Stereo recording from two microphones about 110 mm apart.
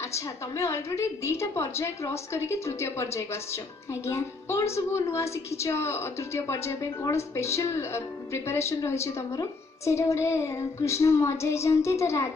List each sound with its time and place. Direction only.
0.5 s a woman's voice: 25° left (ahead or behind)